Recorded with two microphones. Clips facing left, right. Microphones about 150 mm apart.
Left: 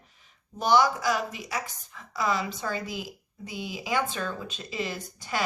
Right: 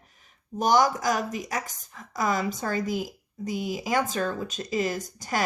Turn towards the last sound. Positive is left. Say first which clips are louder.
# right 3 dB
turn(degrees=-45)  # may be behind; listen again after turning